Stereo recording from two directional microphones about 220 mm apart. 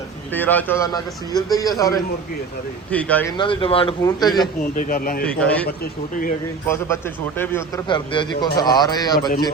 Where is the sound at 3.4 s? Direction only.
20° left (ahead or behind).